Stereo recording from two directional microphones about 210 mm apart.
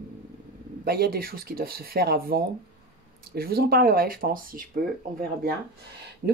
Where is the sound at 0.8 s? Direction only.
45° right (ahead or behind).